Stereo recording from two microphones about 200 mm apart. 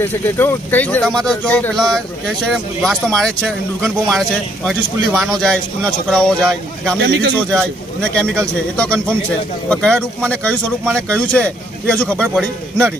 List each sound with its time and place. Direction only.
0.0 s speech: 10° left (ahead or behind)
7.0 s speech: 65° right (ahead or behind)
7.3 s speech: 5° left (ahead or behind)